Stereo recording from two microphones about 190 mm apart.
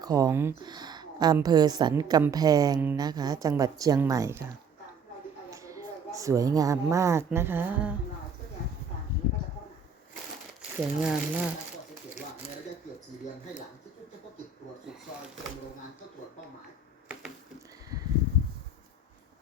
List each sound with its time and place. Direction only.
0.0 s speech: 20° right (ahead or behind)
5.5 s a sound: 15° right (ahead or behind)
6.1 s speech: 15° right (ahead or behind)
10.8 s speech: 5° right (ahead or behind)